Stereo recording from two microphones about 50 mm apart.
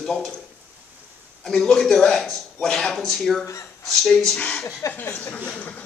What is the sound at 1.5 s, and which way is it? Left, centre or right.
Speech, centre.